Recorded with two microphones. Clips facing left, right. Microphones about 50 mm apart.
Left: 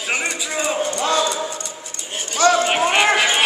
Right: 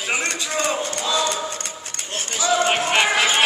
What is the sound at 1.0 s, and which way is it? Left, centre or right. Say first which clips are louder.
Clip-clop: left 4 dB; left.